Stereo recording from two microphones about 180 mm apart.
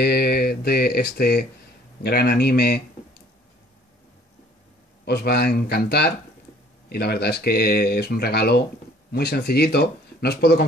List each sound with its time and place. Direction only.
0.0 s speech: 60° left (ahead or behind)
5.0 s speech: 60° left (ahead or behind)